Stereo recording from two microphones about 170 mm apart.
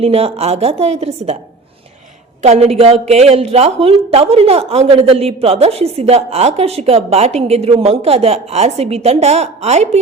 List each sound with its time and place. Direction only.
0.0 s a woman's voice: 35° right (ahead or behind)
2.4 s a woman's voice: 40° right (ahead or behind)